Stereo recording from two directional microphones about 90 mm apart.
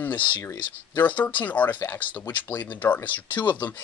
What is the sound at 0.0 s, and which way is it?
Speech, 15° left (ahead or behind).